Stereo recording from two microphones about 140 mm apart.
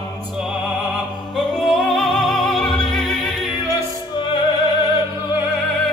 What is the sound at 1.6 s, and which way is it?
Music, centre (ahead or behind).